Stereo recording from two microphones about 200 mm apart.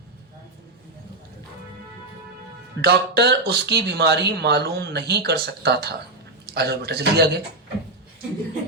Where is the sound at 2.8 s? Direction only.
55° right (ahead or behind).